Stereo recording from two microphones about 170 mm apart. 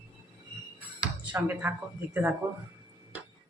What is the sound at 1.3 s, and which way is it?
Speech, 10° right (ahead or behind).